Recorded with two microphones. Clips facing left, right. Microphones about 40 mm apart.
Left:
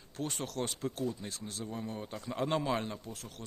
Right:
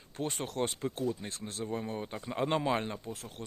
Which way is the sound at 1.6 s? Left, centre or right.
Right.